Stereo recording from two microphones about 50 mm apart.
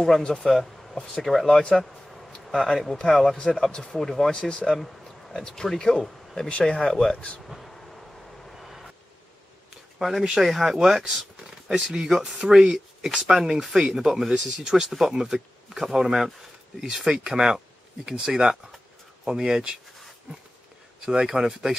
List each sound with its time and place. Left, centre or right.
0.4 s speech: centre
1.6 s speech: centre
2.0 s a sound: centre
2.5 s speech: centre
7.4 s a sound: centre
8.5 s reversing beeps: centre
9.9 s speech: centre
10.2 s speech: centre
21.0 s speech: centre